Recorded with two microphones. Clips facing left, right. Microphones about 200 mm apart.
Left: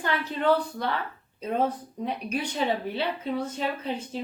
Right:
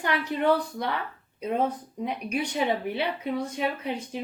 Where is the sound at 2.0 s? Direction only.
10° right (ahead or behind).